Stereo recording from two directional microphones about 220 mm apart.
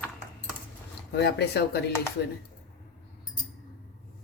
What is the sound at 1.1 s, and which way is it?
Speech, 50° left (ahead or behind).